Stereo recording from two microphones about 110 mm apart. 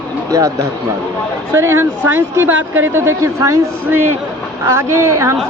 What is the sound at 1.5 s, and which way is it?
Speech, 25° right (ahead or behind).